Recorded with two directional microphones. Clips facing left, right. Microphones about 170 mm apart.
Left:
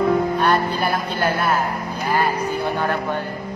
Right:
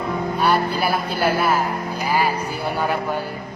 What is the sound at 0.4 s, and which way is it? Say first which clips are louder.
Speech: even; 5° right (ahead or behind).